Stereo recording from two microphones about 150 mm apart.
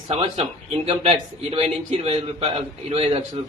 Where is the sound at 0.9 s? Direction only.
40° right (ahead or behind).